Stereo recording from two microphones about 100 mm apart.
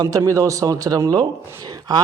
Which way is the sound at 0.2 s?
30° right (ahead or behind).